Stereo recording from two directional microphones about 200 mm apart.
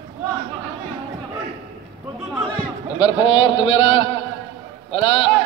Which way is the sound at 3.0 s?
25° left (ahead or behind).